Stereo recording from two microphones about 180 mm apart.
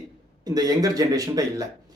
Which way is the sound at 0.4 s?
20° right (ahead or behind).